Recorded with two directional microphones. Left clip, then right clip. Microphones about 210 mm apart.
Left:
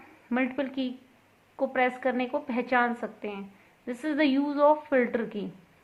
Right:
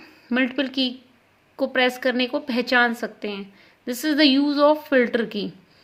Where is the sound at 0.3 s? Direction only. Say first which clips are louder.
Right 6 dB; 40° right (ahead or behind).